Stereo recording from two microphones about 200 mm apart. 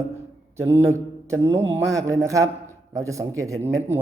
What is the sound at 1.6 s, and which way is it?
Speech, 70° right (ahead or behind).